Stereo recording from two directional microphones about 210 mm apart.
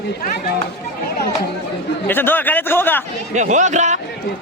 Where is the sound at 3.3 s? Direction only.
35° right (ahead or behind).